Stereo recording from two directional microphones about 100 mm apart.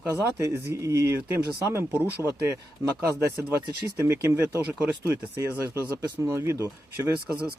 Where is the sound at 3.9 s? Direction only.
25° right (ahead or behind).